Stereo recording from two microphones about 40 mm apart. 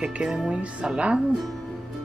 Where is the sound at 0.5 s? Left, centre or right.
Right.